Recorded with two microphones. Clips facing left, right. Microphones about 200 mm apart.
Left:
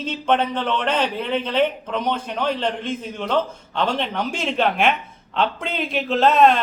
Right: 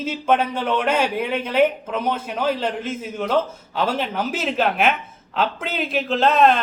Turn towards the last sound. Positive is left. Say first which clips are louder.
# left 1 dB
turn(degrees=0)  # may be behind; listen again after turning